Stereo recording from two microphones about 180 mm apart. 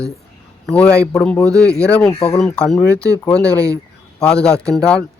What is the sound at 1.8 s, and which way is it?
Speech, 5° left (ahead or behind).